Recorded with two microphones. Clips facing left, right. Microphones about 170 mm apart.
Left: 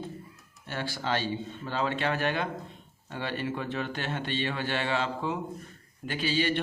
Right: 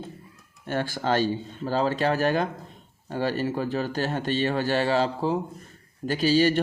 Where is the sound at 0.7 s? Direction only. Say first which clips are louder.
Right 6 dB; 45° right (ahead or behind).